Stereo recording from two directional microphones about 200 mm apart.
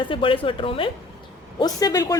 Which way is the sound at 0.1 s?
25° left (ahead or behind).